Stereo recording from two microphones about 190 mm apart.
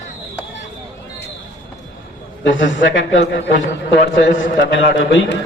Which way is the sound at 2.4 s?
75° left (ahead or behind).